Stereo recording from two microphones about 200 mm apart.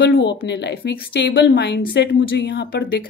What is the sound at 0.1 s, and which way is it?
Speech, 55° left (ahead or behind).